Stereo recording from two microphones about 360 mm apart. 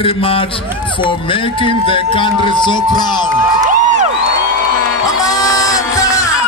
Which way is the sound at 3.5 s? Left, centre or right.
Centre.